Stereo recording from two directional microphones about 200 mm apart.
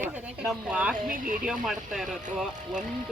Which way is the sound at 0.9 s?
40° right (ahead or behind).